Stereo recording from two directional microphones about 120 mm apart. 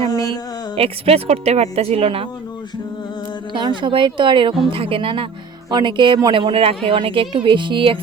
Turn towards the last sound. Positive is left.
turn(degrees=-45)  # may be behind; listen again after turning